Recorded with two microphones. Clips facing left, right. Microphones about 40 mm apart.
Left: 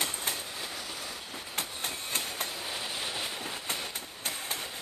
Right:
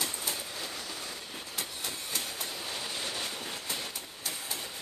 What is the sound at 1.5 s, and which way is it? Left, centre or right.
Train, left.